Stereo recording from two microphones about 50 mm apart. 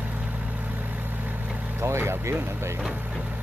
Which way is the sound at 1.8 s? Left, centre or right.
Right.